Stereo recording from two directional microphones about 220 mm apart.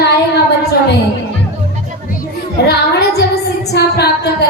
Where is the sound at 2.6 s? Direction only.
50° left (ahead or behind).